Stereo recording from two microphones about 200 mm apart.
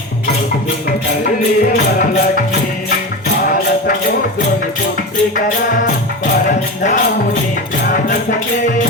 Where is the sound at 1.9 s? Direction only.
45° left (ahead or behind).